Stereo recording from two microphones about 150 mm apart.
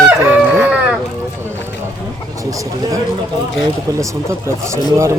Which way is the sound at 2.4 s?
20° right (ahead or behind).